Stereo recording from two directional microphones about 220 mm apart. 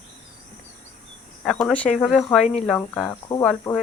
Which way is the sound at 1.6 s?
5° left (ahead or behind).